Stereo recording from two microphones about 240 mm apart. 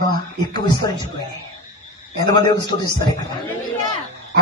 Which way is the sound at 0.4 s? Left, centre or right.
Centre.